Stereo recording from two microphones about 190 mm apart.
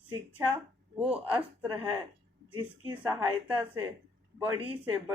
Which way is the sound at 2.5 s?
25° right (ahead or behind).